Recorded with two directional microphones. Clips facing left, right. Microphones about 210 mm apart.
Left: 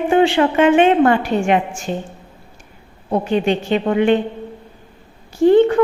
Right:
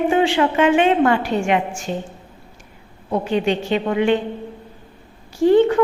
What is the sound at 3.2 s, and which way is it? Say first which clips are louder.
Speech: left 2 dB; 50° left (ahead or behind).